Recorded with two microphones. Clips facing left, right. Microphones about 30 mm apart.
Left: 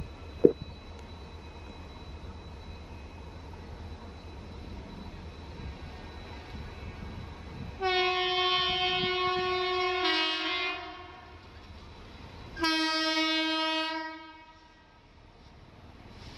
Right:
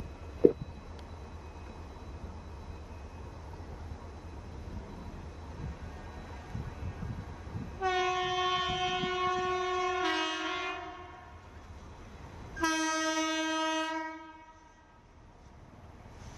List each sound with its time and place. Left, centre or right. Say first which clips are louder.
4.6 s vehicle: even; left
12.5 s train: left 2 dB; left